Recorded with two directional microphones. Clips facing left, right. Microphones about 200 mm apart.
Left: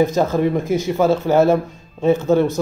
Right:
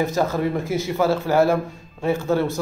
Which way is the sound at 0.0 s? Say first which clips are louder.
Left 5 dB; 20° left (ahead or behind).